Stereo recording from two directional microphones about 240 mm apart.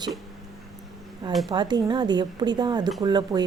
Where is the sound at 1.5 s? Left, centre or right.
Centre.